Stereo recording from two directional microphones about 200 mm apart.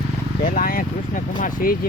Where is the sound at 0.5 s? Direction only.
45° left (ahead or behind).